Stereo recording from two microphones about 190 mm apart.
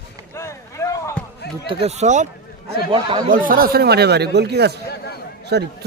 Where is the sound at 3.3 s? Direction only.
45° right (ahead or behind).